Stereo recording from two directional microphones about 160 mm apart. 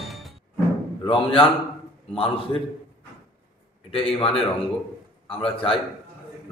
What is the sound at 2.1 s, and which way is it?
Speech, 35° left (ahead or behind).